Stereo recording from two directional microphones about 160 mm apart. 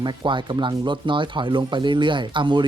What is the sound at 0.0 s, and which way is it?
Speech, 30° right (ahead or behind).